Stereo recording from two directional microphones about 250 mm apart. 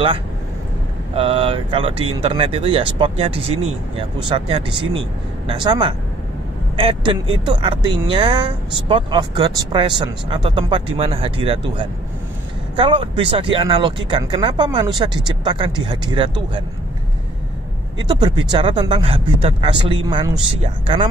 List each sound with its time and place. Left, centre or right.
1.1 s speech: right
17.9 s speech: centre